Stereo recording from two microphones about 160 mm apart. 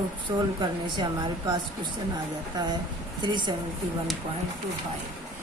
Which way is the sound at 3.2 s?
30° right (ahead or behind).